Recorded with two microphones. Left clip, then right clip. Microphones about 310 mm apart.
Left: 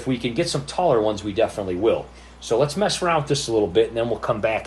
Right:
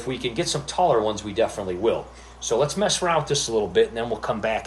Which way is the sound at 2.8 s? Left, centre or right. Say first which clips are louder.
Left 1 dB; left.